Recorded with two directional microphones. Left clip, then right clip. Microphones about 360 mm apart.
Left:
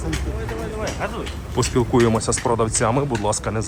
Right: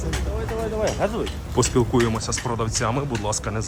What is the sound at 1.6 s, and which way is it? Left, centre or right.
Speech, centre.